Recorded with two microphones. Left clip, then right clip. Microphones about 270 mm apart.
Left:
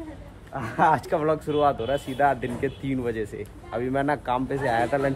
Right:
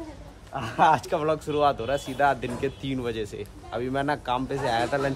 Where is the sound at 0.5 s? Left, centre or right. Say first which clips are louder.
Even; centre.